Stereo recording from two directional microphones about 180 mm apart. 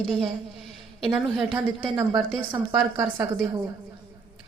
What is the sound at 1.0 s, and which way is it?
Speech, centre (ahead or behind).